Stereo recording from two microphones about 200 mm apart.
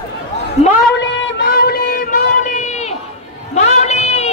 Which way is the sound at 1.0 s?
65° left (ahead or behind).